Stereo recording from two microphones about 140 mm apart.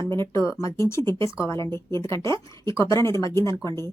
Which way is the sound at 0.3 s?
20° left (ahead or behind).